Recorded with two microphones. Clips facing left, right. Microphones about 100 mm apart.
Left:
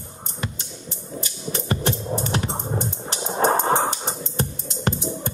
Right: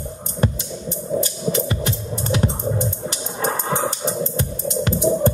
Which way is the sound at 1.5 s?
40° left (ahead or behind).